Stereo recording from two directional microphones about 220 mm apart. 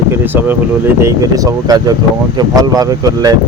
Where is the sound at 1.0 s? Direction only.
15° right (ahead or behind).